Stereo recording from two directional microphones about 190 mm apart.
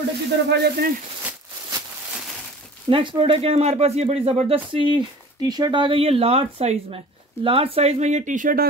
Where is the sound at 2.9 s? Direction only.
30° right (ahead or behind).